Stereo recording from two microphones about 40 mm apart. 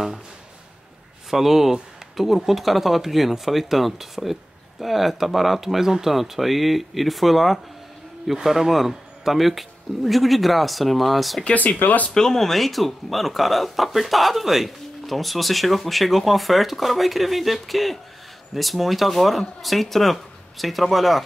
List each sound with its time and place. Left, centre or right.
1.3 s speech: centre
11.8 s speech: left
12.1 s speech: centre